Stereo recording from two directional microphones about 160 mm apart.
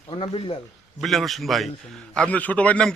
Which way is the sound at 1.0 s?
Centre (ahead or behind).